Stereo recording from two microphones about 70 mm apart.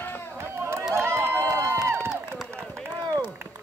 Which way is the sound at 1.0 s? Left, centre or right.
Right.